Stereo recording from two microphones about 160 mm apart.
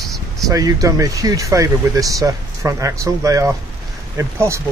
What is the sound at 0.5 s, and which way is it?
Speech, 20° right (ahead or behind).